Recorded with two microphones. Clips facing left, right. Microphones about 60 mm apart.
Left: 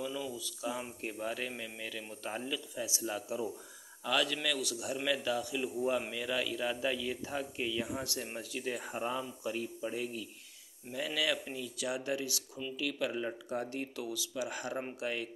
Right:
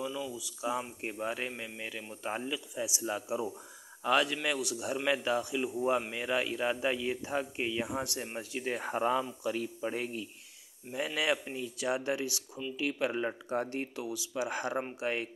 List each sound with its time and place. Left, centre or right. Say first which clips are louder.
0.0 s a sound: right 1 dB; centre
1.1 s speech: right 2 dB; right
8.9 s speech: right 6 dB; right
9.8 s speech: right 2 dB; right
10.9 s speech: right 3 dB; right
14.3 s speech: right 6 dB; right